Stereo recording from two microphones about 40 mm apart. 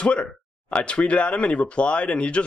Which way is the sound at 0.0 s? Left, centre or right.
Left.